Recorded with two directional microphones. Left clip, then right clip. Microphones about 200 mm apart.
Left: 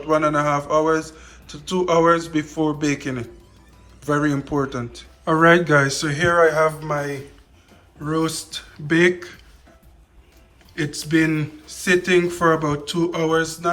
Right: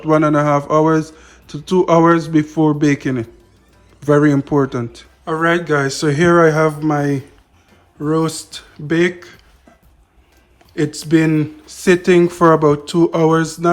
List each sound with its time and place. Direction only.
0.1 s speech: 30° right (ahead or behind)
5.2 s speech: 5° right (ahead or behind)
6.4 s speech: 45° right (ahead or behind)
7.9 s speech: 20° right (ahead or behind)
10.8 s speech: 20° right (ahead or behind)